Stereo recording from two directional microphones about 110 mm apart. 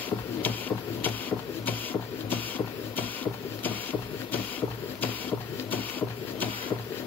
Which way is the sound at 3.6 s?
15° left (ahead or behind).